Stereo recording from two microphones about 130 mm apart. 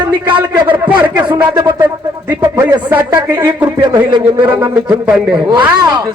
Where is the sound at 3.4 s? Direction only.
35° right (ahead or behind).